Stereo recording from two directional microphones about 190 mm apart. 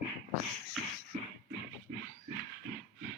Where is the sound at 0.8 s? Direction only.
Centre (ahead or behind).